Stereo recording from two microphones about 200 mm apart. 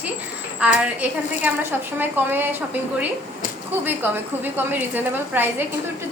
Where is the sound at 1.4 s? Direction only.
10° right (ahead or behind).